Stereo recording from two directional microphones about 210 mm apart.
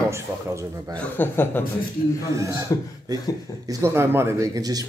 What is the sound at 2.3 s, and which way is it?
Speech, 15° right (ahead or behind).